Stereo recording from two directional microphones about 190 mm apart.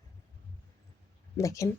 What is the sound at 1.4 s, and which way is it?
Speech, 15° left (ahead or behind).